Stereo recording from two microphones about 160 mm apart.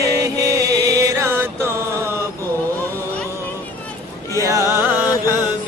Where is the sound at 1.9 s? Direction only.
15° right (ahead or behind).